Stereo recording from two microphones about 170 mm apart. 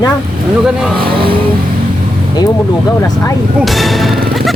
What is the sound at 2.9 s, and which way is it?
Speech, 20° left (ahead or behind).